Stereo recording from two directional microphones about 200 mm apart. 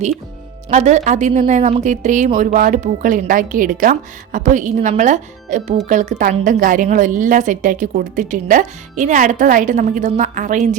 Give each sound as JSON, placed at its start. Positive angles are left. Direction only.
{"t": 0.7, "sound": "speech", "side_deg": -35}